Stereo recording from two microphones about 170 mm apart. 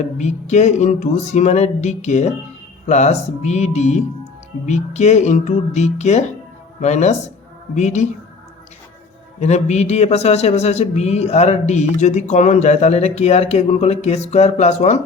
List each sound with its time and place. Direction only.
0.0 s a man's voice: 40° left (ahead or behind)
9.4 s a man's voice: 40° left (ahead or behind)